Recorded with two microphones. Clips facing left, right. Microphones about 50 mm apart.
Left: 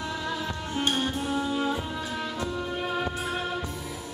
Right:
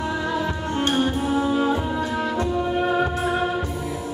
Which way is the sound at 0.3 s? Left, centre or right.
Centre.